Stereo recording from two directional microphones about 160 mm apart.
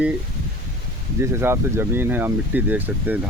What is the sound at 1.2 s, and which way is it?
Speech, 15° right (ahead or behind).